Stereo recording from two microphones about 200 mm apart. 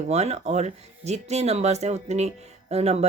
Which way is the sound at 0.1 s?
35° right (ahead or behind).